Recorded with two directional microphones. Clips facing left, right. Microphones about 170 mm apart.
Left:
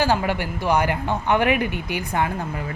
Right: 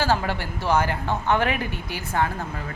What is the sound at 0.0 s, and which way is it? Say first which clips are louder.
Speech: left 3 dB; 15° left (ahead or behind).